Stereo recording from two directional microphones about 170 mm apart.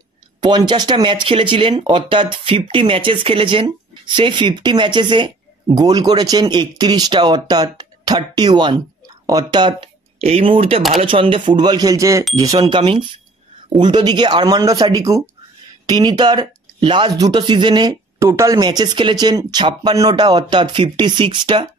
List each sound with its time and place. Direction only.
0.4 s speech: 25° right (ahead or behind)